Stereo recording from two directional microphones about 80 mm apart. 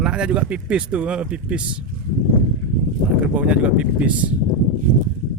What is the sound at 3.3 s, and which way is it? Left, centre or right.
Speech, centre.